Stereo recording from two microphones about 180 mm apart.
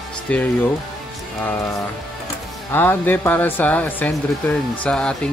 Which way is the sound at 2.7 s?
10° left (ahead or behind).